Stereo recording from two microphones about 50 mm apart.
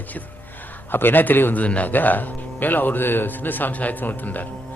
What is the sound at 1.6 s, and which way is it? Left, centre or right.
A man's voice, left.